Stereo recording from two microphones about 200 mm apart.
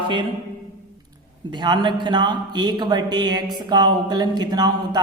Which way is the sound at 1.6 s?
20° right (ahead or behind).